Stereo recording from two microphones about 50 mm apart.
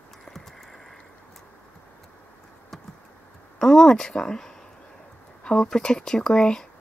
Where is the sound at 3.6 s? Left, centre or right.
Centre.